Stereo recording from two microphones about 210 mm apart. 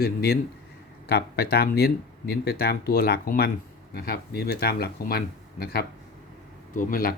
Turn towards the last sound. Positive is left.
turn(degrees=40)  # may be behind; listen again after turning